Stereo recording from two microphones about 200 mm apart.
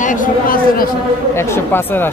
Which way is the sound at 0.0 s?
40° left (ahead or behind).